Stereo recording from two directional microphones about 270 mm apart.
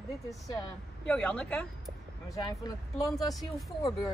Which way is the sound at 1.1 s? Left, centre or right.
Centre.